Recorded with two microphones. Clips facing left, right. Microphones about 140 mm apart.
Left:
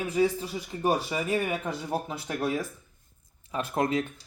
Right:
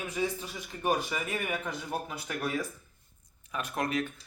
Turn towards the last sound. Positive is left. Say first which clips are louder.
# left 5 dB
turn(degrees=25)  # may be behind; listen again after turning